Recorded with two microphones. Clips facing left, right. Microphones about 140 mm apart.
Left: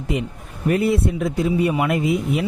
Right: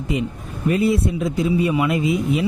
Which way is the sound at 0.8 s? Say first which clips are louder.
Right 2 dB; 60° left (ahead or behind).